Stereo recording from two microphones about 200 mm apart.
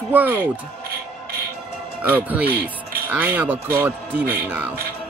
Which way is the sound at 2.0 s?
10° right (ahead or behind).